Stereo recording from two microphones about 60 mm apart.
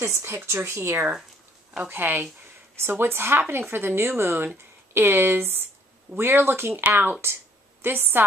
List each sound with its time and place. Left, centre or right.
0.2 s a woman's voice: right
1.9 s a woman's voice: right